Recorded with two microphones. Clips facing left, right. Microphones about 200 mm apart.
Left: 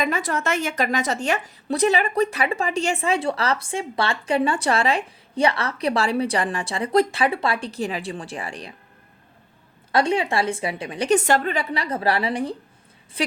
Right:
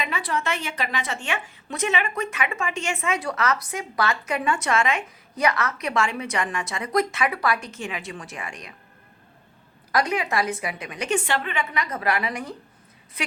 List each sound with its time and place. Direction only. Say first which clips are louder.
0.0 s a woman's voice: left 4 dB; 45° left (ahead or behind)
9.9 s a woman's voice: left 3 dB; 30° left (ahead or behind)